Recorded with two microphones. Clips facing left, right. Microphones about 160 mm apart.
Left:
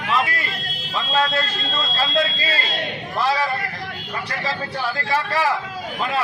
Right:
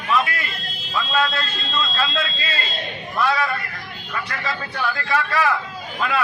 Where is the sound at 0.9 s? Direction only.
30° left (ahead or behind).